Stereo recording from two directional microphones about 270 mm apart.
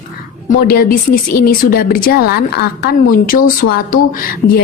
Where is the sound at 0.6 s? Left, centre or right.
Left.